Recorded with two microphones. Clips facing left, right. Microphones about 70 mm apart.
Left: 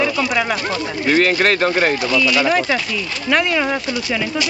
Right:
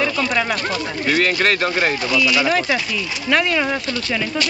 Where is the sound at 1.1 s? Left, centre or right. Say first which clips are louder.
Left 3 dB; left.